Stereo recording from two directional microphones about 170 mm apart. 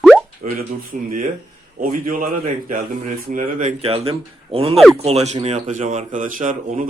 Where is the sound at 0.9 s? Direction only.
55° right (ahead or behind).